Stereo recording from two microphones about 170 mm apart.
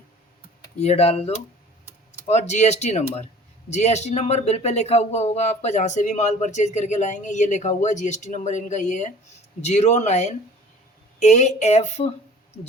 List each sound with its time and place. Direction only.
0.8 s speech: 35° left (ahead or behind)